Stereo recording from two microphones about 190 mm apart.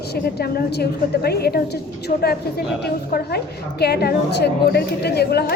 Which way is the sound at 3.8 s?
55° left (ahead or behind).